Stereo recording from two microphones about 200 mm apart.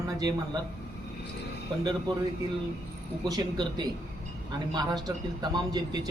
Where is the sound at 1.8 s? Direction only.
20° right (ahead or behind).